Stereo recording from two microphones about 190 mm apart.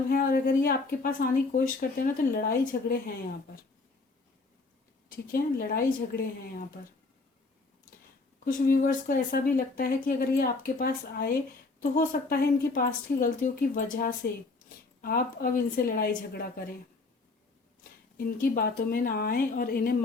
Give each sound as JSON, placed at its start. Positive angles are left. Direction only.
{"t": 0.1, "sound": "speech", "side_deg": 50}
{"t": 5.0, "sound": "speech", "side_deg": 50}
{"t": 8.4, "sound": "speech", "side_deg": 50}
{"t": 14.2, "sound": "speech", "side_deg": 55}
{"t": 18.2, "sound": "speech", "side_deg": 50}